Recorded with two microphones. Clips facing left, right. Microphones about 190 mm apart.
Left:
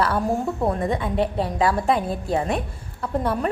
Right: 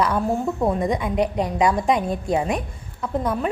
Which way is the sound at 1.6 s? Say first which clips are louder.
Right 1 dB; 15° right (ahead or behind).